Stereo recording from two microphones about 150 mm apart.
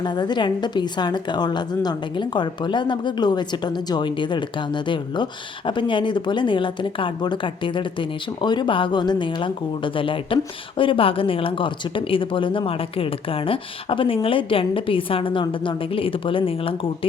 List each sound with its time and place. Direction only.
0.0 s speech: 30° left (ahead or behind)